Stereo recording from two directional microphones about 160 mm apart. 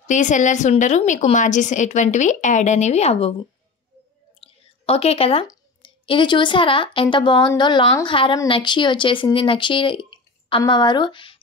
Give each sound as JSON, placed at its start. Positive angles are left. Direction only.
{"t": 0.0, "sound": "a woman's voice", "side_deg": 50}
{"t": 4.4, "sound": "a sound", "side_deg": 40}
{"t": 5.5, "sound": "a woman's voice", "side_deg": 30}